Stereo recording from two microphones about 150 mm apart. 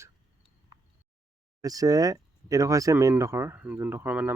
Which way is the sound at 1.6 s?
25° right (ahead or behind).